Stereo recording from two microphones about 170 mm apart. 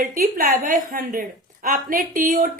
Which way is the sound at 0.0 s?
55° right (ahead or behind).